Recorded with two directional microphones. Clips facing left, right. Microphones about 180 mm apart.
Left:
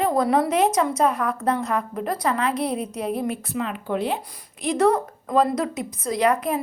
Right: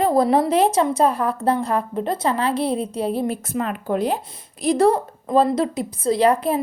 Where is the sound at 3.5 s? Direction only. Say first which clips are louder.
Right 3 dB; 45° right (ahead or behind).